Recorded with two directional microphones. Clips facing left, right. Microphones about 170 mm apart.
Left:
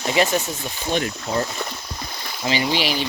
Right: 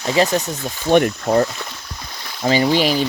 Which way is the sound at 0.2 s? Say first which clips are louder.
Right 3 dB; 35° right (ahead or behind).